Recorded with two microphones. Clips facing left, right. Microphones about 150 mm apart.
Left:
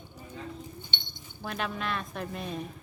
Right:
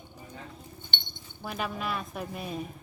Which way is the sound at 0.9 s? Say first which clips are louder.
Right 1 dB; 55° right (ahead or behind).